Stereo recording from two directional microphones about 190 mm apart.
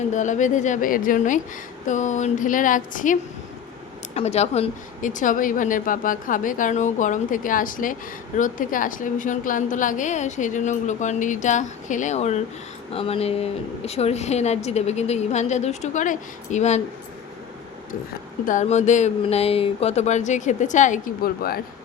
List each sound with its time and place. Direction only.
0.1 s a woman's voice: 40° left (ahead or behind)
18.1 s a woman's voice: 45° left (ahead or behind)